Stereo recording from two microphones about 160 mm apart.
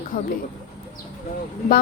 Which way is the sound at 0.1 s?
70° left (ahead or behind).